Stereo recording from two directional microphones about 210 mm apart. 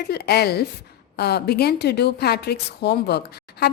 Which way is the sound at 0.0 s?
50° left (ahead or behind).